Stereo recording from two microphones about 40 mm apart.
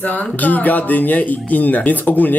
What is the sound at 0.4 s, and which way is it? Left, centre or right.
Speech, left.